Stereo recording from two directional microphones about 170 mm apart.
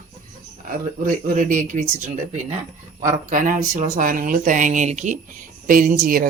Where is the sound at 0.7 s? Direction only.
50° right (ahead or behind).